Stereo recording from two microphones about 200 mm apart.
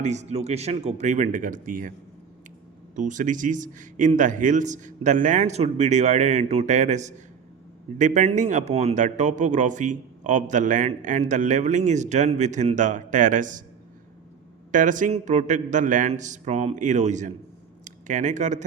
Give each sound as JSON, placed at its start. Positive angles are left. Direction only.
{"t": 0.0, "sound": "speech", "side_deg": -35}
{"t": 2.9, "sound": "speech", "side_deg": -40}
{"t": 14.7, "sound": "speech", "side_deg": -40}